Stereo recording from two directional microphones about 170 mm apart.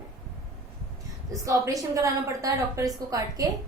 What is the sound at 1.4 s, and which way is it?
A woman's voice, 20° right (ahead or behind).